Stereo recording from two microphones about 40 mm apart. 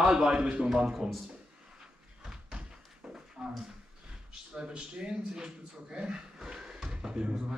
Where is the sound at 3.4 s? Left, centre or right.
Centre.